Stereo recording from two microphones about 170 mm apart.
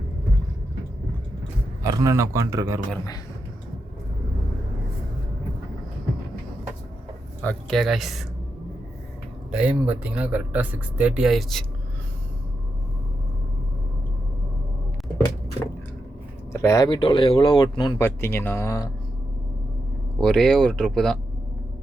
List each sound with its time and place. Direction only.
1.8 s speech: 20° right (ahead or behind)
7.4 s speech: centre (ahead or behind)
9.5 s speech: 5° right (ahead or behind)
16.5 s speech: 15° left (ahead or behind)
18.0 s speech: 15° left (ahead or behind)
20.1 s speech: 5° left (ahead or behind)